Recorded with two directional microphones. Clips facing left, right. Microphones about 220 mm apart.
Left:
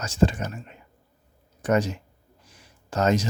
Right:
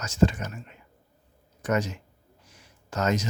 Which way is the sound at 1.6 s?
30° left (ahead or behind).